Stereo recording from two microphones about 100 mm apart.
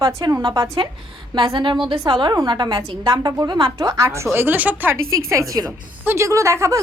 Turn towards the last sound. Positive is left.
turn(degrees=-30)  # may be behind; listen again after turning